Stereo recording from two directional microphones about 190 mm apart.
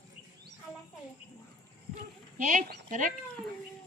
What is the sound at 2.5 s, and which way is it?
Speech, 45° right (ahead or behind).